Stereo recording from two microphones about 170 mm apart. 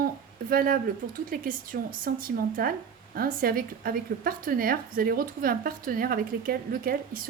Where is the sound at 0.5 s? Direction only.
60° right (ahead or behind).